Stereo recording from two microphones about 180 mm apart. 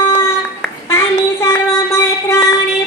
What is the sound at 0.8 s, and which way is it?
Child singing, 15° left (ahead or behind).